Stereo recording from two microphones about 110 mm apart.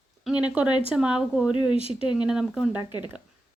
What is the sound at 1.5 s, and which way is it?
Speech, 50° left (ahead or behind).